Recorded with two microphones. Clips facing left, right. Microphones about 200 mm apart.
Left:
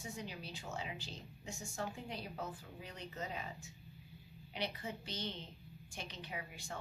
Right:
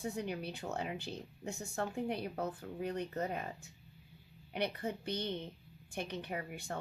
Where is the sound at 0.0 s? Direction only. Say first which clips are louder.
Right 8 dB; 60° right (ahead or behind).